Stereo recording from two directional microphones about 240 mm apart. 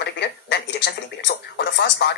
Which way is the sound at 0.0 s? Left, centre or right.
Left.